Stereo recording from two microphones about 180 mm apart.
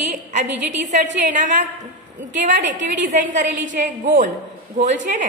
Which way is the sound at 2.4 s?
45° right (ahead or behind).